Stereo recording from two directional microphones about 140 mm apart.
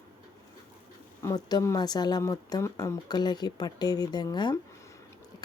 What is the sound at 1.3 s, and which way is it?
Speech, 30° left (ahead or behind).